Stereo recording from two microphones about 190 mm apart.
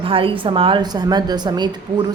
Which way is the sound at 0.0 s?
30° right (ahead or behind).